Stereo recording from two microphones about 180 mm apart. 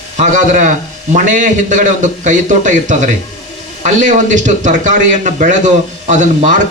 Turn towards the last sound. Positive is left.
turn(degrees=-45)  # may be behind; listen again after turning